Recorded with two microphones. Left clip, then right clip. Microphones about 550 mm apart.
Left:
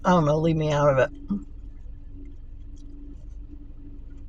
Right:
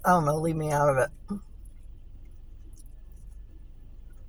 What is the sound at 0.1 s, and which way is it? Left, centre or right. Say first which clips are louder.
Speech: left 2 dB; right.